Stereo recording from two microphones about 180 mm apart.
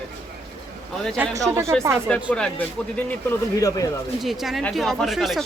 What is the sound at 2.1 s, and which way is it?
Speech, 5° left (ahead or behind).